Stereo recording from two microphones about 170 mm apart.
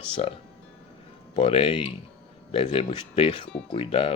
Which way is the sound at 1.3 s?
35° left (ahead or behind).